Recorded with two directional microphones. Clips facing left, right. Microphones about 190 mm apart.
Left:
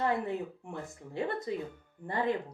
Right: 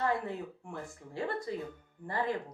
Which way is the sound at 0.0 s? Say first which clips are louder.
Left 2 dB; 20° left (ahead or behind).